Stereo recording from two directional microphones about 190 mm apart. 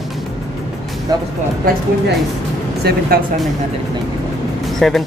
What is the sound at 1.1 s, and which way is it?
Speech, 20° right (ahead or behind).